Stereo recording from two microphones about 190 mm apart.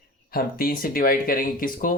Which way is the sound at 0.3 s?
50° left (ahead or behind).